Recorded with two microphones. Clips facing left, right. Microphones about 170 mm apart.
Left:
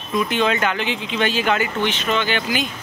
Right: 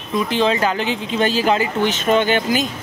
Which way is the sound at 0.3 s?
30° right (ahead or behind).